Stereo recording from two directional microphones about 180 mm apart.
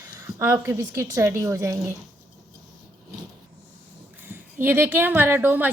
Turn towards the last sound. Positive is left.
turn(degrees=-10)  # may be behind; listen again after turning